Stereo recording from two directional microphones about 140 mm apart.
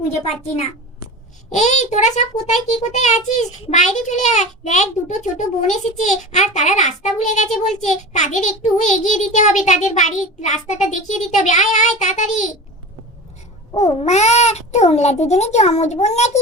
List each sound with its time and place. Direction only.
1.5 s a child's voice: 55° left (ahead or behind)
13.7 s a child's voice: 50° left (ahead or behind)